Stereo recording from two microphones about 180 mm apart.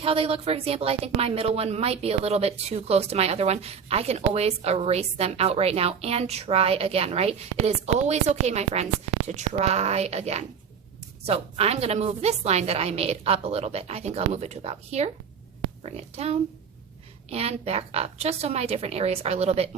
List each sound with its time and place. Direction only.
0.0 s a woman's voice: 30° right (ahead or behind)